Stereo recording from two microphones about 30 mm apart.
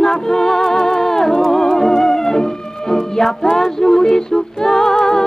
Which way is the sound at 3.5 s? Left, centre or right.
Centre.